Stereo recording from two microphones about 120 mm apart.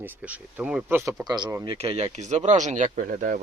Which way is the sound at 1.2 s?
35° right (ahead or behind).